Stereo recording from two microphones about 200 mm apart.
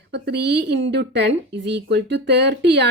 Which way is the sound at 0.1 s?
55° right (ahead or behind).